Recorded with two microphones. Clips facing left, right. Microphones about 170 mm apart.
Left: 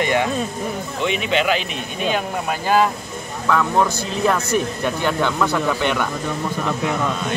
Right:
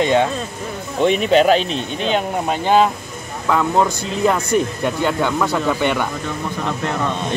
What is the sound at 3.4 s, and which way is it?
Speech, 15° right (ahead or behind).